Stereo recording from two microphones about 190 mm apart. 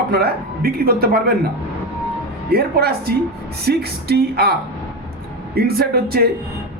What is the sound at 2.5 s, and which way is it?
A man's voice, 55° right (ahead or behind).